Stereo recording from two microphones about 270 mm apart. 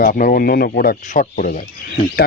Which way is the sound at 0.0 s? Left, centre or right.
Left.